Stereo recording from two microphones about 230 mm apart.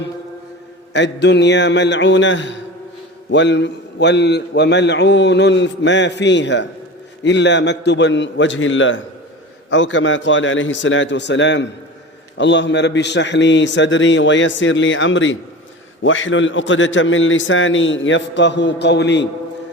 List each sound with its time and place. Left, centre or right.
0.9 s a man's voice: left